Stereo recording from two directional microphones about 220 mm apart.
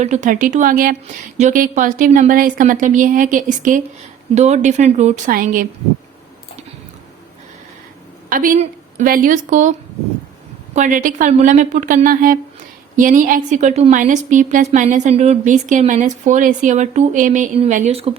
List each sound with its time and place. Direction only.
0.0 s a woman's voice: 35° right (ahead or behind)
8.3 s a woman's voice: 40° right (ahead or behind)
10.8 s a woman's voice: 35° right (ahead or behind)